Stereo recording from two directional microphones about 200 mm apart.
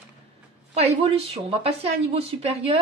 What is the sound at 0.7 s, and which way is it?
A woman's voice, 30° right (ahead or behind).